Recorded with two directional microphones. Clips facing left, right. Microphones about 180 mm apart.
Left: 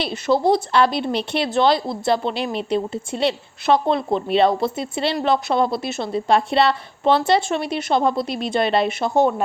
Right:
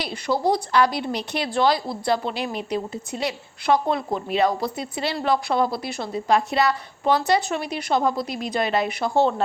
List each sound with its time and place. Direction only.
0.0 s speech: 25° left (ahead or behind)